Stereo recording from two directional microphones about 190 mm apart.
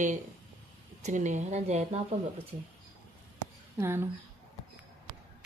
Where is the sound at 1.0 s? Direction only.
40° right (ahead or behind).